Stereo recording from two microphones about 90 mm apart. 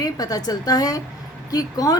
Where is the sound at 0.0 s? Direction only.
45° left (ahead or behind).